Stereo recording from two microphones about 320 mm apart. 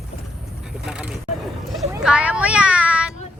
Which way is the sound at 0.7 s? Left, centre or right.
Centre.